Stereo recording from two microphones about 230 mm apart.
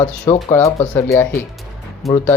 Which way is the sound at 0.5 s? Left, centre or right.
Centre.